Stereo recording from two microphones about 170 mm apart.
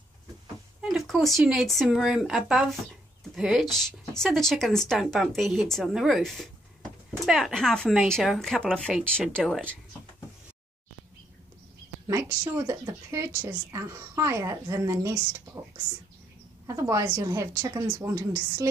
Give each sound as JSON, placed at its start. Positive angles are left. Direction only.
{"t": 0.7, "sound": "speech", "side_deg": 0}
{"t": 12.1, "sound": "a woman's voice", "side_deg": -20}
{"t": 16.6, "sound": "a woman's voice", "side_deg": -20}